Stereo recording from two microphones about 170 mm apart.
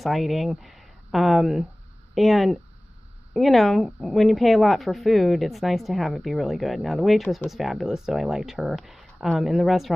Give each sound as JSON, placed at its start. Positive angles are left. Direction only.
{"t": 0.0, "sound": "speech", "side_deg": 0}